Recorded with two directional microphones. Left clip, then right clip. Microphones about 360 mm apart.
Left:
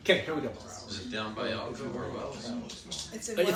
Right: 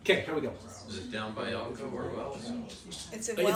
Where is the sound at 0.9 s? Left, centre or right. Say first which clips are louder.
Left 1 dB; centre.